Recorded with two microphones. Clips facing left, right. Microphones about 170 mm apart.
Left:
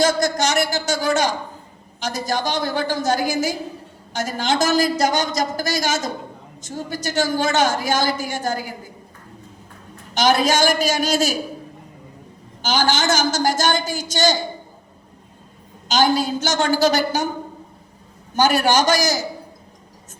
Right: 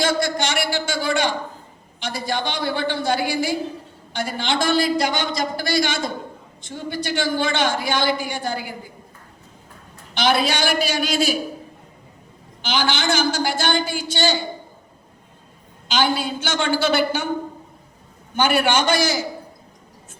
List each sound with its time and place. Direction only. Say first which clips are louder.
0.0 s a man's voice: left 3 dB; 45° left (ahead or behind)
10.2 s a woman's voice: left 3 dB; 45° left (ahead or behind)
12.6 s a woman's voice: left 3 dB; 45° left (ahead or behind)
15.9 s a woman's voice: left 3 dB; 40° left (ahead or behind)
18.3 s a woman's voice: left 2 dB; 40° left (ahead or behind)